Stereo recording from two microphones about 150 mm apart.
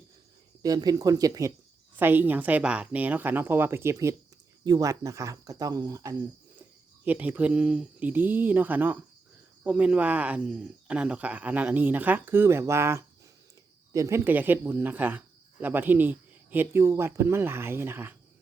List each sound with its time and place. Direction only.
0.6 s speech: 25° right (ahead or behind)
7.0 s speech: 10° right (ahead or behind)